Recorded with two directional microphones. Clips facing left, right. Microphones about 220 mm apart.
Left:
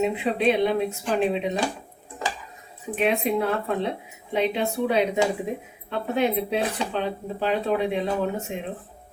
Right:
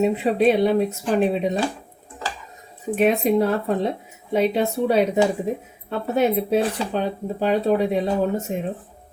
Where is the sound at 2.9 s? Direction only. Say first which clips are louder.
Right 5 dB; 40° right (ahead or behind).